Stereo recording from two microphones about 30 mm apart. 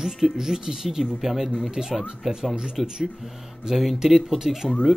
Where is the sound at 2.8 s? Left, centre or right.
Centre.